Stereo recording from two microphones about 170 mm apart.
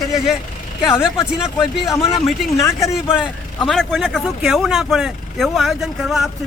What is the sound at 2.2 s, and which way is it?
Speech, centre (ahead or behind).